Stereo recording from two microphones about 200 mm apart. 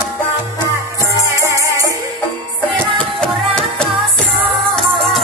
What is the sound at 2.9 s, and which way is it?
Music, 5° left (ahead or behind).